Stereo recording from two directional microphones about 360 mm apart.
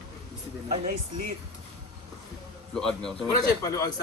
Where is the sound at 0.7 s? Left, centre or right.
Right.